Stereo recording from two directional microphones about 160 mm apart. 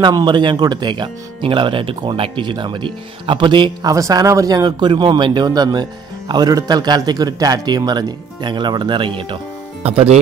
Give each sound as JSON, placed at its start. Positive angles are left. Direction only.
{"t": 0.0, "sound": "speech", "side_deg": -30}